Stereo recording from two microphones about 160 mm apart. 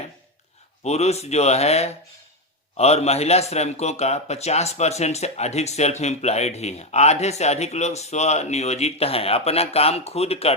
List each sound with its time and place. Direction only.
0.9 s a man's voice: 40° left (ahead or behind)